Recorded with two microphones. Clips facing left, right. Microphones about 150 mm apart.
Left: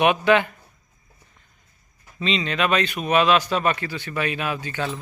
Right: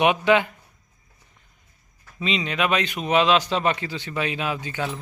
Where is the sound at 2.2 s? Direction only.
15° right (ahead or behind).